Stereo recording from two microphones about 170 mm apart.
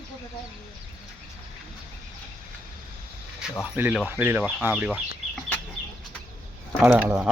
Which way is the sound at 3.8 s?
10° right (ahead or behind).